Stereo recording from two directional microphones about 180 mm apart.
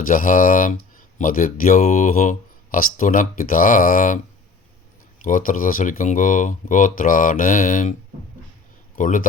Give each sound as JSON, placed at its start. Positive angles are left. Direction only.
{"t": 0.1, "sound": "speech", "side_deg": 50}
{"t": 5.2, "sound": "speech", "side_deg": 50}
{"t": 9.0, "sound": "speech", "side_deg": 45}